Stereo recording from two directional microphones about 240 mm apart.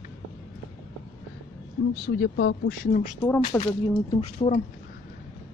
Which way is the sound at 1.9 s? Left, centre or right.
Left.